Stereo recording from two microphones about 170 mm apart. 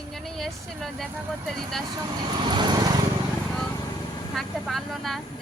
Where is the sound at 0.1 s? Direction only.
Centre (ahead or behind).